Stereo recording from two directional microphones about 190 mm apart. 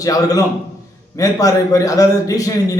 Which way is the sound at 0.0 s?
20° left (ahead or behind).